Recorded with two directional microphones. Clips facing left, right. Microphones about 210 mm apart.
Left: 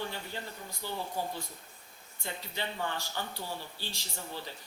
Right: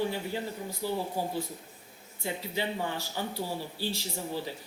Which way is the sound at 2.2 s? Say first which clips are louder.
Right 6 dB; 5° right (ahead or behind).